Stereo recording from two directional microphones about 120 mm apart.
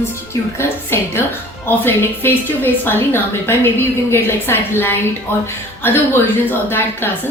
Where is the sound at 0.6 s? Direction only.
20° left (ahead or behind).